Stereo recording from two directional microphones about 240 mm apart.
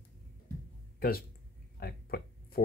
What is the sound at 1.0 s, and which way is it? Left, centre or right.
Speech, left.